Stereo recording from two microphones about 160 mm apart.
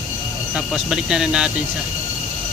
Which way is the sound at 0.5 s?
5° right (ahead or behind).